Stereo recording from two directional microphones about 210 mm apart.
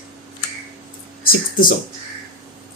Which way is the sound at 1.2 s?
45° left (ahead or behind).